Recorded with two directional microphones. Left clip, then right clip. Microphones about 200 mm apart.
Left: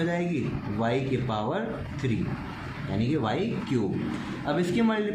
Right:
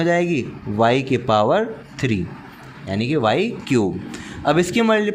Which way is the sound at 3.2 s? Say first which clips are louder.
Right 13 dB; 55° right (ahead or behind).